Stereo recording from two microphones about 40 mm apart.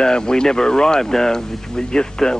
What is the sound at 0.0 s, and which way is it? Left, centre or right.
Speech, centre.